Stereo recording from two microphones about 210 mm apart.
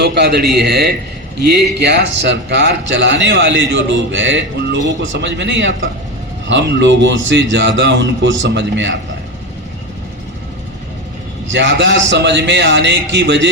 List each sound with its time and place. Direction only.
0.0 s a man's voice: 50° right (ahead or behind)
11.4 s speech: 60° right (ahead or behind)